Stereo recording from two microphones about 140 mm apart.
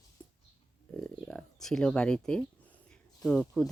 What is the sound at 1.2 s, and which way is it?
Speech, 5° left (ahead or behind).